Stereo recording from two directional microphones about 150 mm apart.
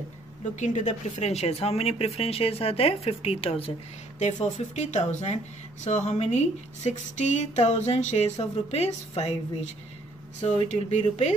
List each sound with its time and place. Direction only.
0.6 s speech: 55° left (ahead or behind)
4.2 s speech: 50° left (ahead or behind)